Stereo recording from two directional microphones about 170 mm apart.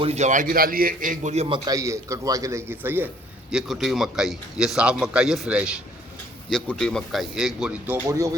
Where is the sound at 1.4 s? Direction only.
25° right (ahead or behind); by 5.8 s 5° right (ahead or behind).